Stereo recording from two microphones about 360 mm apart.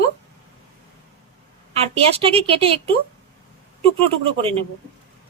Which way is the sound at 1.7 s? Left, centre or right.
Centre.